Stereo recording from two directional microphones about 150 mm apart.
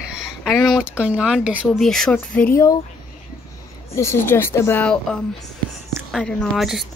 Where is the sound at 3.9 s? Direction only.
20° left (ahead or behind).